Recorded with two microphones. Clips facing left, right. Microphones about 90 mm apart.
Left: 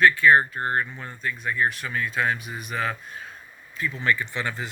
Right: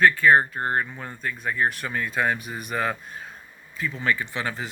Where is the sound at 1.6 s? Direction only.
50° right (ahead or behind).